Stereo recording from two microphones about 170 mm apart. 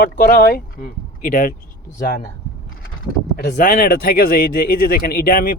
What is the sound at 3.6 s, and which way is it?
Speech, 55° left (ahead or behind).